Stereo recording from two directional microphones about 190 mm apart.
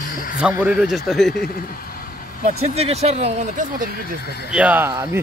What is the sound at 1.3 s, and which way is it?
Speech, 50° left (ahead or behind).